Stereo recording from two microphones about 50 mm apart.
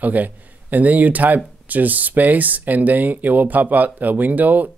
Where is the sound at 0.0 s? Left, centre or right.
Right.